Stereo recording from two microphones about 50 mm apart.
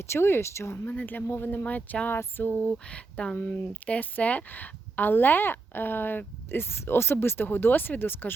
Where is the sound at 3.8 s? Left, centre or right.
Left.